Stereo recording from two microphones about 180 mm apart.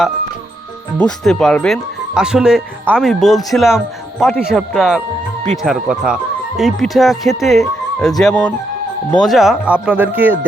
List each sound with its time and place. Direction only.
0.9 s speech: 5° left (ahead or behind)